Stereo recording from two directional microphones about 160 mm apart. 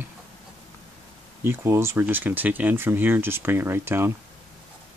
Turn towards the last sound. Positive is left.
turn(degrees=-15)  # may be behind; listen again after turning